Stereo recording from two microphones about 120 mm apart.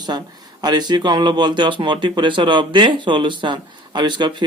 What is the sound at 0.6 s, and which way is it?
Speech, 35° right (ahead or behind).